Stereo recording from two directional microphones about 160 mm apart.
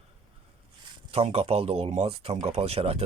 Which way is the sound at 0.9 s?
40° right (ahead or behind).